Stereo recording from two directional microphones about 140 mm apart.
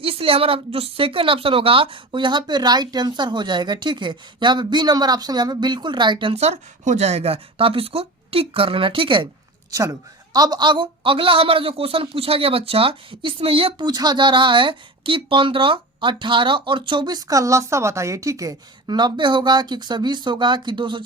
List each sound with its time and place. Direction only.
0.0 s speech: 40° right (ahead or behind)
9.7 s a woman's voice: 25° right (ahead or behind); by 13.8 s 40° right (ahead or behind)
13.8 s speech: 30° right (ahead or behind)